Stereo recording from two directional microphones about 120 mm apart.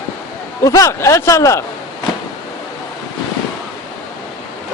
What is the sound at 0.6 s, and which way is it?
A man's voice, 25° left (ahead or behind).